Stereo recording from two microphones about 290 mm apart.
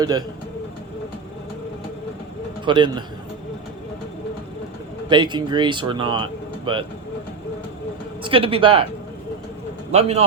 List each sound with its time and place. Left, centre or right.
0.0 s speech: centre
2.6 s speech: centre
5.0 s speech: centre
8.2 s speech: centre
9.9 s speech: right